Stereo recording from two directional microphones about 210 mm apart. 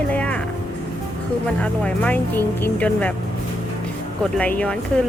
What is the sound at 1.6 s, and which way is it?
Speech, 5° left (ahead or behind).